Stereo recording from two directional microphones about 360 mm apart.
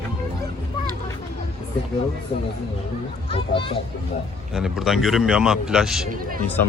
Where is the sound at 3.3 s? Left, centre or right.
Centre.